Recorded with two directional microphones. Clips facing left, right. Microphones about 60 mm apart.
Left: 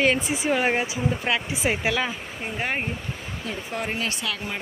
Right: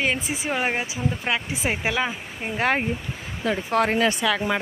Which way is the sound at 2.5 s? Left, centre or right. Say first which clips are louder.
Right 6 dB; right.